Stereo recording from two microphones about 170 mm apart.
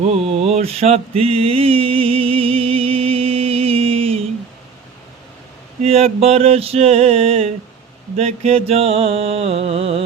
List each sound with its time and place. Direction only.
0.0 s mantra: 35° right (ahead or behind)
5.8 s mantra: 35° right (ahead or behind)